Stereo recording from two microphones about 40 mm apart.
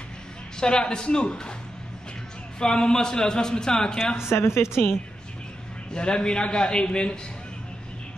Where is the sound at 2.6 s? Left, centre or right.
Centre.